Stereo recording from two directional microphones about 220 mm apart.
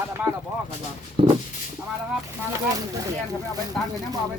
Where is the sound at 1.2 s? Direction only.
25° right (ahead or behind).